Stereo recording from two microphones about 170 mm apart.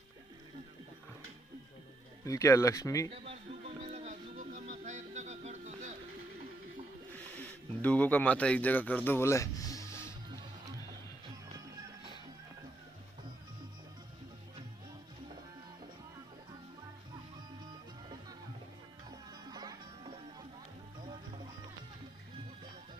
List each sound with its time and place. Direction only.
2.2 s speech: 20° left (ahead or behind)
3.8 s music: 40° right (ahead or behind)
7.2 s speech: 10° left (ahead or behind)
17.3 s music: 25° right (ahead or behind)
19.3 s music: 25° right (ahead or behind)